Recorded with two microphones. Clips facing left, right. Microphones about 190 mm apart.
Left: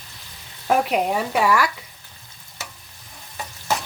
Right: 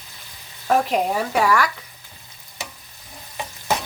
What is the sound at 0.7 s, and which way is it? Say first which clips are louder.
Speech: even; 5° left (ahead or behind).